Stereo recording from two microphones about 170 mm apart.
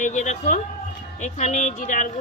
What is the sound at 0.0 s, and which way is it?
Speech, 45° left (ahead or behind).